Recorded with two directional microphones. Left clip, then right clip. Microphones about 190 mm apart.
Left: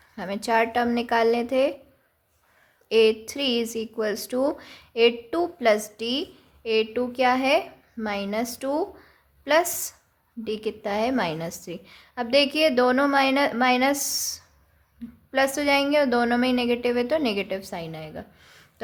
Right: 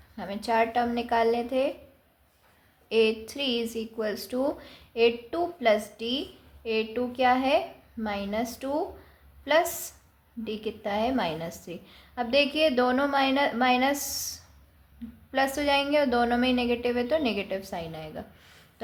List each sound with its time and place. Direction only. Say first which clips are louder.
0.2 s a woman's voice: left 3 dB; 40° left (ahead or behind)
2.9 s a woman's voice: left 5 dB; 35° left (ahead or behind)